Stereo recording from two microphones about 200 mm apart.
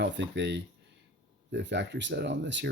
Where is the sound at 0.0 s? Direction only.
60° right (ahead or behind).